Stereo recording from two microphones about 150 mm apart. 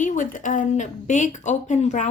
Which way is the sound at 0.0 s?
60° left (ahead or behind).